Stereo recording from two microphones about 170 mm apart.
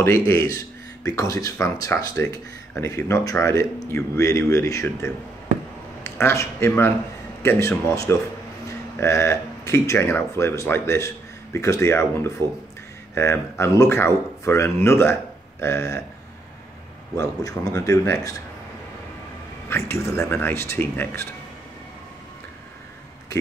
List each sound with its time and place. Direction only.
0.3 s speech: 20° left (ahead or behind)
17.1 s speech: 20° left (ahead or behind)
19.7 s speech: 15° left (ahead or behind)